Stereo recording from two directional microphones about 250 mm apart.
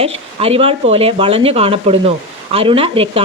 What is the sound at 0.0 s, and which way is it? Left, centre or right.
Speech, right.